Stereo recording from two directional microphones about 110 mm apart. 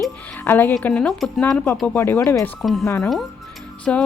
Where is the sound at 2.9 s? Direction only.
25° left (ahead or behind).